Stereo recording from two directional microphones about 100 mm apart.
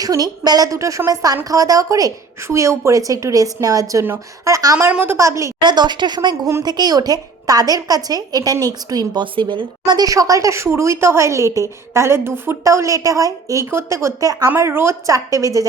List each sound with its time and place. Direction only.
0.0 s a woman's voice: 40° right (ahead or behind)
4.9 s a woman's voice: 20° right (ahead or behind)
5.5 s speech: 45° right (ahead or behind)
6.4 s a woman's voice: 35° right (ahead or behind)
9.2 s a woman's voice: 55° right (ahead or behind); by 15.6 s 35° right (ahead or behind)